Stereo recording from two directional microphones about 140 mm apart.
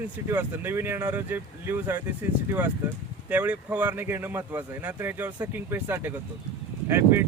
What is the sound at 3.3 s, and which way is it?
Speech, 10° right (ahead or behind).